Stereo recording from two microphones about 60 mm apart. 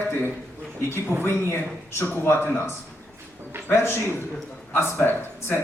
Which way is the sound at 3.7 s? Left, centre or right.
Left.